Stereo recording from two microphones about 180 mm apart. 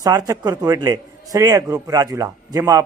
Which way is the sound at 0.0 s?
20° right (ahead or behind).